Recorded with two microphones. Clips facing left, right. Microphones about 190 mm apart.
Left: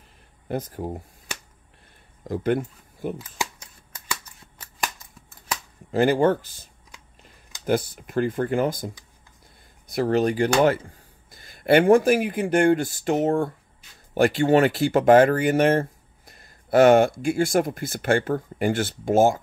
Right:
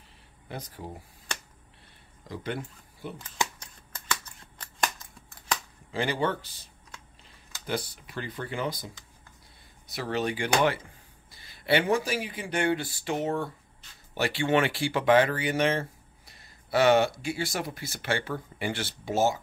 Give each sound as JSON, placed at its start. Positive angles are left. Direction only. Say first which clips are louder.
{"t": 0.5, "sound": "speech", "louder": "left 10 dB", "side_deg": 50}
{"t": 2.2, "sound": "speech", "louder": "left 11 dB", "side_deg": 50}
{"t": 3.2, "sound": "scissors", "louder": "left 1 dB", "side_deg": 10}
{"t": 5.9, "sound": "speech", "louder": "left 10 dB", "side_deg": 45}
{"t": 9.9, "sound": "speech", "louder": "left 9 dB", "side_deg": 45}